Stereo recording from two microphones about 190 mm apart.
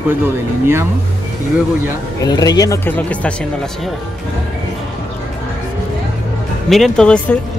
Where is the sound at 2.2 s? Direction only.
20° left (ahead or behind).